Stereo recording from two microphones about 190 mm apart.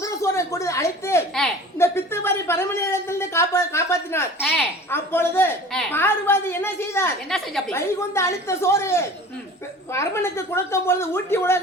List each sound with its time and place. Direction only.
0.0 s a sound: 15° left (ahead or behind)
1.4 s a woman's voice: 10° left (ahead or behind)
7.3 s a woman's voice: centre (ahead or behind)
7.7 s a woman's voice: 15° left (ahead or behind)